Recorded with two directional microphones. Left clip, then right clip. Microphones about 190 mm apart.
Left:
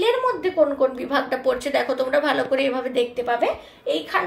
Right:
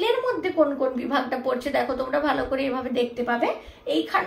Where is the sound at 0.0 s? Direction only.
40° left (ahead or behind).